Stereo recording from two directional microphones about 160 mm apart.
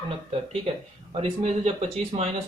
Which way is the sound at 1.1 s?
40° right (ahead or behind).